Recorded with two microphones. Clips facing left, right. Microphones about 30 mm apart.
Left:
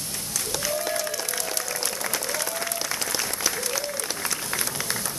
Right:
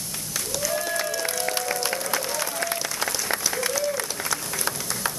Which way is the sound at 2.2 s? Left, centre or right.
Centre.